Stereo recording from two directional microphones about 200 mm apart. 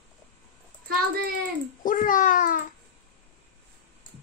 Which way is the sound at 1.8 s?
45° left (ahead or behind).